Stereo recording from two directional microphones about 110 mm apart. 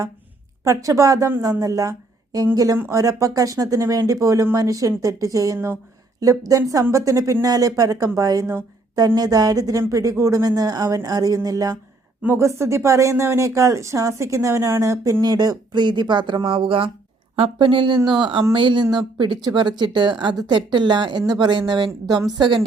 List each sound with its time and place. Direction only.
0.6 s a woman's voice: 30° right (ahead or behind)